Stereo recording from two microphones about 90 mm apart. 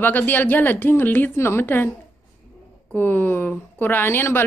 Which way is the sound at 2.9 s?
20° left (ahead or behind).